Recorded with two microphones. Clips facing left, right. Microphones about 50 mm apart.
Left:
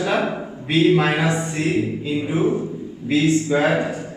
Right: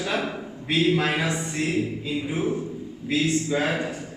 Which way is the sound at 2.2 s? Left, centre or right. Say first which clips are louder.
Left 7 dB; left.